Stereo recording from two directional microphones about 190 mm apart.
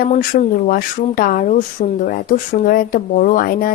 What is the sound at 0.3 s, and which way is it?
Speech, 45° left (ahead or behind).